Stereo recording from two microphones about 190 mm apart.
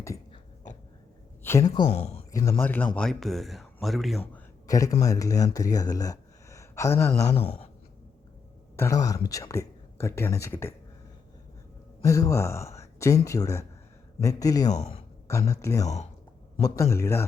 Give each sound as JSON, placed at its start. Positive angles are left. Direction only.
{"t": 1.5, "sound": "speech", "side_deg": 15}
{"t": 1.9, "sound": "speech", "side_deg": 35}
{"t": 2.3, "sound": "speech", "side_deg": 20}
{"t": 4.2, "sound": "a sound", "side_deg": 15}
{"t": 5.0, "sound": "speech", "side_deg": 20}
{"t": 7.3, "sound": "speech", "side_deg": 30}
{"t": 8.7, "sound": "speech", "side_deg": 15}
{"t": 12.0, "sound": "speech", "side_deg": 15}